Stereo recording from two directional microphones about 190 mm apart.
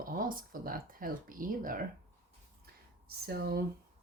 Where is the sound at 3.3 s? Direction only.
55° right (ahead or behind).